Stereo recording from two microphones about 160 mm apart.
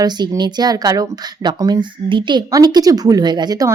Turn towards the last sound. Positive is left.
turn(degrees=-25)  # may be behind; listen again after turning